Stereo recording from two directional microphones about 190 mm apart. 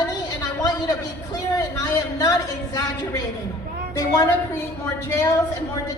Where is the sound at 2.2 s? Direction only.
20° left (ahead or behind).